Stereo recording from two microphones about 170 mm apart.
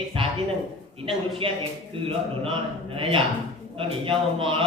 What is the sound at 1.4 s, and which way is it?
Speech, 30° right (ahead or behind).